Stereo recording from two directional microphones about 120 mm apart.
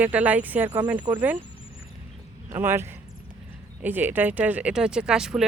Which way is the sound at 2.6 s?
20° right (ahead or behind).